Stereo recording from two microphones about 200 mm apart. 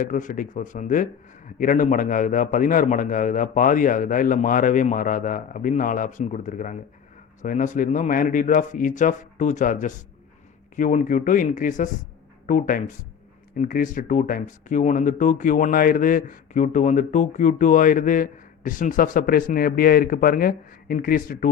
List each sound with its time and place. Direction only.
0.0 s speech: 40° left (ahead or behind)